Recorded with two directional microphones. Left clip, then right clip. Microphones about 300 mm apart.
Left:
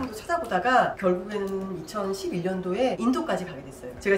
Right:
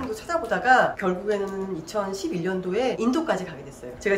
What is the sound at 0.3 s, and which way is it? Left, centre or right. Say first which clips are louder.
Speech: right 3 dB; centre.